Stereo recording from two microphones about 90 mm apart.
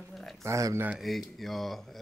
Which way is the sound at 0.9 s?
Centre (ahead or behind).